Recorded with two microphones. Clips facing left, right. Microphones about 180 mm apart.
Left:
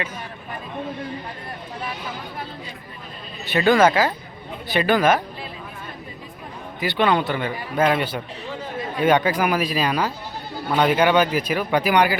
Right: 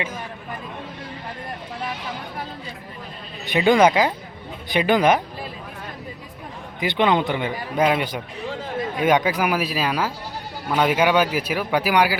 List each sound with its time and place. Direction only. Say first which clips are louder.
3.4 s a man's voice: even; 15° right (ahead or behind)
6.7 s a man's voice: right 1 dB; 20° right (ahead or behind)